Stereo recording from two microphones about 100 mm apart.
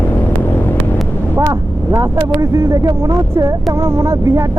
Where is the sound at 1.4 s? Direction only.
35° right (ahead or behind).